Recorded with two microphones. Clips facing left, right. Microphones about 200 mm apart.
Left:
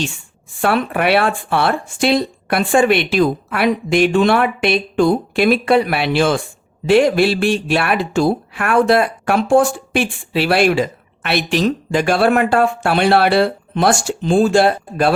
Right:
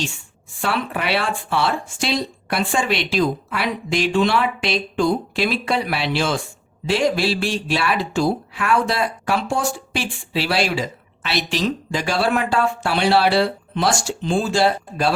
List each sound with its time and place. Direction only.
0.6 s speech: 55° left (ahead or behind)